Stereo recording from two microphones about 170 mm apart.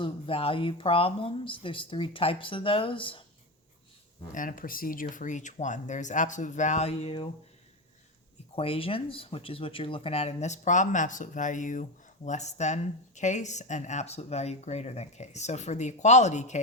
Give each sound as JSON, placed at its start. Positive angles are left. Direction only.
{"t": 0.0, "sound": "speech", "side_deg": 35}
{"t": 4.3, "sound": "speech", "side_deg": 50}
{"t": 8.5, "sound": "speech", "side_deg": 35}